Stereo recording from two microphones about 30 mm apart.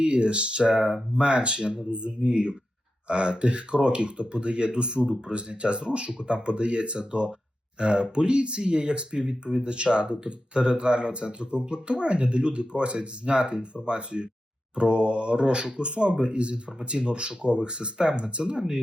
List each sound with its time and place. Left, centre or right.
0.0 s speech: right